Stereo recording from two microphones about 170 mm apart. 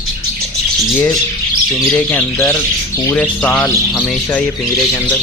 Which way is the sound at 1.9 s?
5° left (ahead or behind).